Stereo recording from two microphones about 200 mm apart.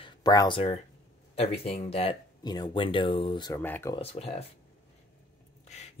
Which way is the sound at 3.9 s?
30° left (ahead or behind).